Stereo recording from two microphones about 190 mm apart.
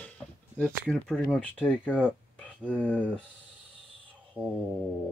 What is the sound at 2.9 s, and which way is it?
Speech, 5° left (ahead or behind).